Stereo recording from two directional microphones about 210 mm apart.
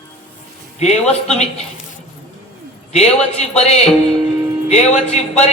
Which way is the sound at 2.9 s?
30° left (ahead or behind).